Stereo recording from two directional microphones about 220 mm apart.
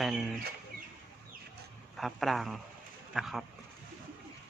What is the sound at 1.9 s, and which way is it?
A man's voice, centre (ahead or behind).